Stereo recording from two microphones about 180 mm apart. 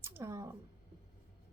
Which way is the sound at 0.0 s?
15° right (ahead or behind).